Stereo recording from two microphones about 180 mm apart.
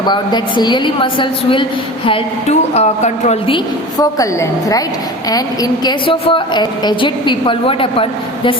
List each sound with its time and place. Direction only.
0.0 s a woman's voice: 25° left (ahead or behind)